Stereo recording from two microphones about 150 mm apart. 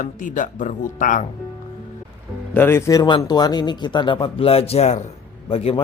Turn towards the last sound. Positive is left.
turn(degrees=40)  # may be behind; listen again after turning